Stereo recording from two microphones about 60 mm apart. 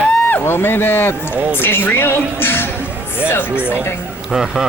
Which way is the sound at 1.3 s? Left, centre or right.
Right.